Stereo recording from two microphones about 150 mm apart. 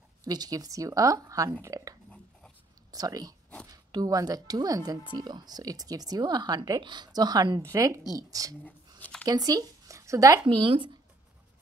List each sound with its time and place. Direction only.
0.2 s speech: 25° right (ahead or behind)